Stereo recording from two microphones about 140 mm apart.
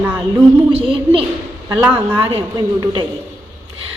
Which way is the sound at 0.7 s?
40° right (ahead or behind).